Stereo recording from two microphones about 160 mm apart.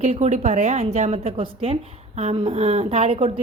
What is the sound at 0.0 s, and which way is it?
A woman's voice, 45° right (ahead or behind).